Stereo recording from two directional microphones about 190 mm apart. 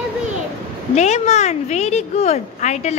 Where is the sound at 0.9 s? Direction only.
35° left (ahead or behind).